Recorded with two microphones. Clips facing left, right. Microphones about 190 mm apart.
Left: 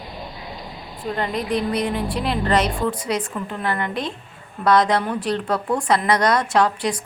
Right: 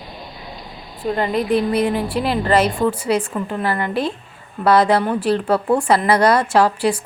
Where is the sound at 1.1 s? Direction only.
5° right (ahead or behind).